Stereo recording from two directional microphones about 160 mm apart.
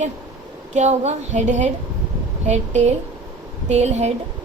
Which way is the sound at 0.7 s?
45° right (ahead or behind).